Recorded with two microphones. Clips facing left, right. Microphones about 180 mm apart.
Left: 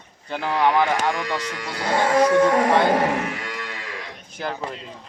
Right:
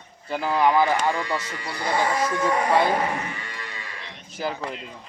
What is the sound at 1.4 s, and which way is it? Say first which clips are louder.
Speech: left 2 dB; 75° left (ahead or behind).